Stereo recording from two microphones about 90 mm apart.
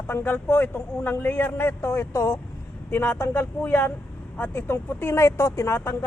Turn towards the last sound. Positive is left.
turn(degrees=30)  # may be behind; listen again after turning